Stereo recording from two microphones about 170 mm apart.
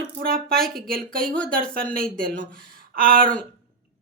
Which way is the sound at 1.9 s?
60° right (ahead or behind).